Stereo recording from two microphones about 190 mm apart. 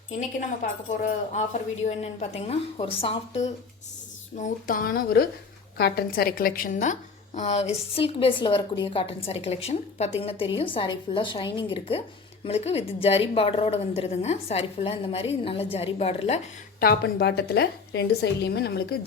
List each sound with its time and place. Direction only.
0.1 s a woman's voice: 40° left (ahead or behind)
4.4 s a woman's voice: 45° left (ahead or behind)
16.8 s a woman's voice: 60° left (ahead or behind)